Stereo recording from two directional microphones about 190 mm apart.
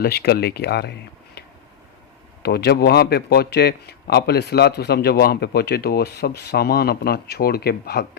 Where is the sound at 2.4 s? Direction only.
55° left (ahead or behind).